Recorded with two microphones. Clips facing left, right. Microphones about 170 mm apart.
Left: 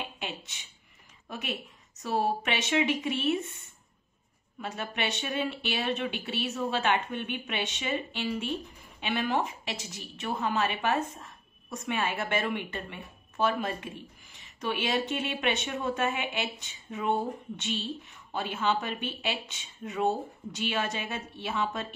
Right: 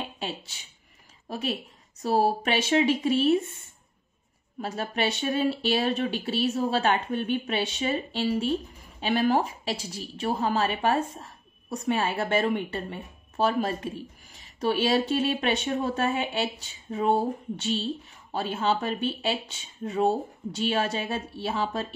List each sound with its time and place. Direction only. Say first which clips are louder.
0.0 s a sound: right 4 dB; 35° right (ahead or behind)
1.3 s a woman's voice: right 6 dB; 35° right (ahead or behind)
4.6 s a woman's voice: right 5 dB; 35° right (ahead or behind)